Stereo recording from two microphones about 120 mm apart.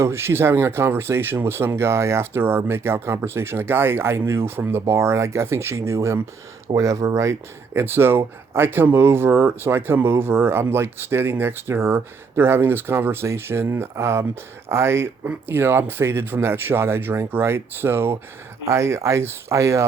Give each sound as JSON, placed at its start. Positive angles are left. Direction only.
{"t": 0.0, "sound": "speech", "side_deg": -20}